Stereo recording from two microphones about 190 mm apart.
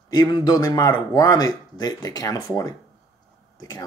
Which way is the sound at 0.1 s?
20° left (ahead or behind).